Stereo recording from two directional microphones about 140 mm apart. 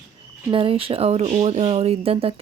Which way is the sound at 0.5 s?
40° right (ahead or behind).